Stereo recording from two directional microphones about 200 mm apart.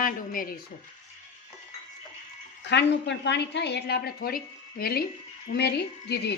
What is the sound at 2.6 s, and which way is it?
A woman's voice, 60° left (ahead or behind).